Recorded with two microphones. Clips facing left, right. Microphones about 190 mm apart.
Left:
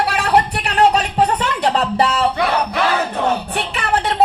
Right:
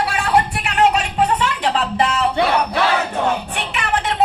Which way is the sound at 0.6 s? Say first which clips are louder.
Left 2 dB; 35° left (ahead or behind).